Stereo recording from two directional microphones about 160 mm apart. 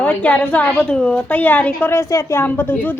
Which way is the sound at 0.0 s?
5° left (ahead or behind).